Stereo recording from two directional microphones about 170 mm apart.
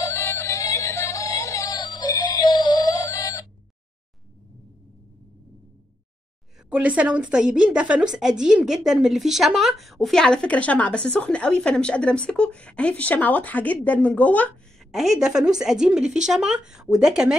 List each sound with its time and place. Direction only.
0.0 s music: 15° left (ahead or behind)
6.7 s a woman's voice: 10° right (ahead or behind); by 14.5 s 10° left (ahead or behind)
14.9 s a woman's voice: centre (ahead or behind)